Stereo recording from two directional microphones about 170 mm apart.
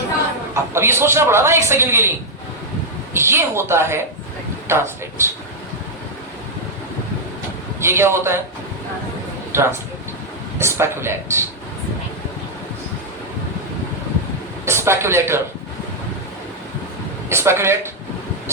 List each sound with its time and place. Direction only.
0.5 s a man's voice: 15° right (ahead or behind)
3.2 s a man's voice: 15° right (ahead or behind)
7.8 s a man's voice: 15° right (ahead or behind)
9.5 s a man's voice: 15° right (ahead or behind)
14.6 s speech: 15° right (ahead or behind)
17.2 s a man's voice: 15° right (ahead or behind)